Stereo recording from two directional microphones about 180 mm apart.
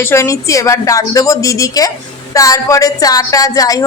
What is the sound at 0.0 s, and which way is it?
A woman's voice, 15° left (ahead or behind).